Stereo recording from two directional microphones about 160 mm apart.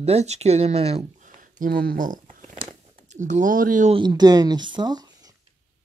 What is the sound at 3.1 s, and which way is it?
Speech, 50° right (ahead or behind).